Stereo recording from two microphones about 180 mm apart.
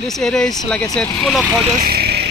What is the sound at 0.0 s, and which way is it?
Speech, centre (ahead or behind).